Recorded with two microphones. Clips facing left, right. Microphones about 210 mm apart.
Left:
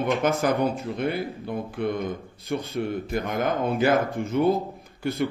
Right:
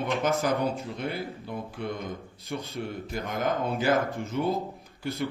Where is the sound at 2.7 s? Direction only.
55° left (ahead or behind).